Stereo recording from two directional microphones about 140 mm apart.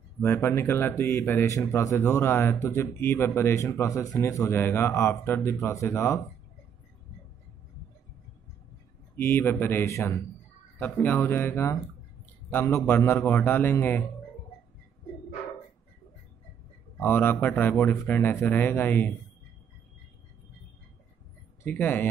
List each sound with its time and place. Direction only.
0.2 s a man's voice: 20° left (ahead or behind)
9.1 s a man's voice: 15° left (ahead or behind)
17.0 s a man's voice: 15° left (ahead or behind)
21.6 s a man's voice: 15° left (ahead or behind)